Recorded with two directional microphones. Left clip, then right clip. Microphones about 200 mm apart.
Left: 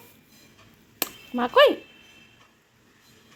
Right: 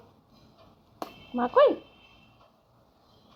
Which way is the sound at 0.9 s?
20° left (ahead or behind).